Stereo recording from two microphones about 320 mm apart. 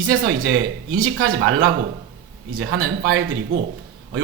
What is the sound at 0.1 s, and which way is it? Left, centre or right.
Speech, right.